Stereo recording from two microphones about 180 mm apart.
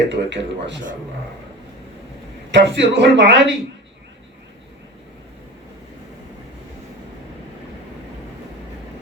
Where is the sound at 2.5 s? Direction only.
80° right.